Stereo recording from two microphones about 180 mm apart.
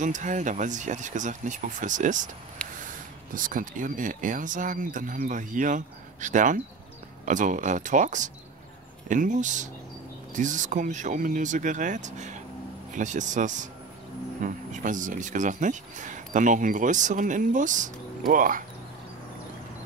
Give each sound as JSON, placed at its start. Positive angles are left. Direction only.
{"t": 0.0, "sound": "speech", "side_deg": -45}